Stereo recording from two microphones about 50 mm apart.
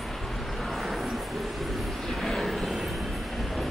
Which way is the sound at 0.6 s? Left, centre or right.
Centre.